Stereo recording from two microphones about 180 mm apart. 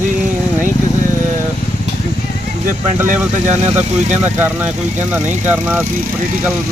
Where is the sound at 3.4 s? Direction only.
40° right (ahead or behind).